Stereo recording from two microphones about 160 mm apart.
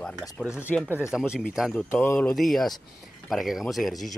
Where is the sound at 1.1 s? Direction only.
5° right (ahead or behind).